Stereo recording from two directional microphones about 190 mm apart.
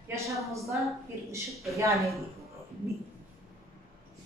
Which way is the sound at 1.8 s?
15° right (ahead or behind).